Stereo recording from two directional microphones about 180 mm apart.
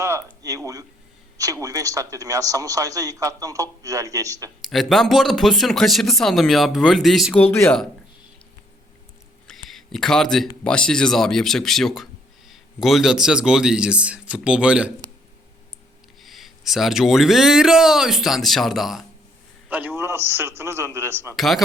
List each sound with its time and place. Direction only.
0.0 s a sound: 15° right (ahead or behind)
0.4 s a man's voice: 20° right (ahead or behind)
4.6 s speech: centre (ahead or behind)
7.4 s speech: 10° left (ahead or behind)
9.6 s speech: centre (ahead or behind)
16.2 s a man's voice: centre (ahead or behind)
21.3 s speech: centre (ahead or behind)